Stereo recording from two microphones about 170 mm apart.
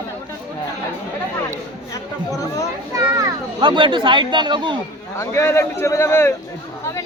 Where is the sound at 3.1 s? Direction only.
25° right (ahead or behind).